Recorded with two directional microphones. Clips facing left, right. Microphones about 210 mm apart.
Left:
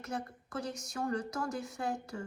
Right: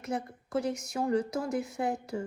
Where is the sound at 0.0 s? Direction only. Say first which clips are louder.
Right 5 dB; 20° right (ahead or behind).